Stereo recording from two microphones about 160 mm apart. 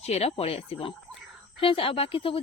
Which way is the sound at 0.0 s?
40° left (ahead or behind).